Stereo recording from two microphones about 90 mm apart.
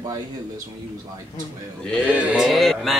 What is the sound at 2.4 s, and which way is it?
Speech, centre (ahead or behind).